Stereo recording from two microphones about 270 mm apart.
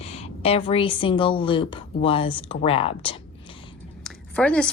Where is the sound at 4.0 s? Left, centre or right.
Centre.